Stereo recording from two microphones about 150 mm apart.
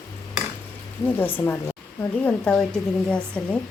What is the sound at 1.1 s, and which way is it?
Speech, 10° left (ahead or behind).